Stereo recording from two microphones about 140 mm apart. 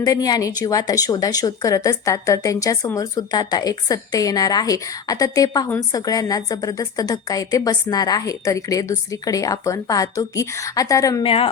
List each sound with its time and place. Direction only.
0.0 s a woman's voice: 25° left (ahead or behind)
11.2 s a woman's voice: 40° left (ahead or behind)